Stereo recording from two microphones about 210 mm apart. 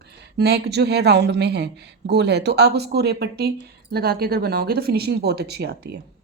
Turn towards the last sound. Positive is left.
turn(degrees=-50)  # may be behind; listen again after turning